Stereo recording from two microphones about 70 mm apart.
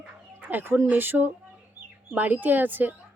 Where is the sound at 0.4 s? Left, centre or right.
Right.